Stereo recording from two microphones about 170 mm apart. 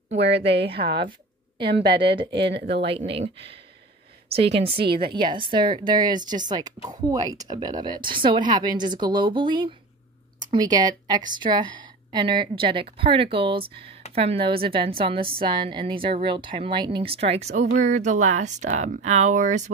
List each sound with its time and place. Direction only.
0.2 s a woman's voice: 90° right
1.6 s a woman's voice: 75° right (ahead or behind)
3.1 s speech: 35° right (ahead or behind)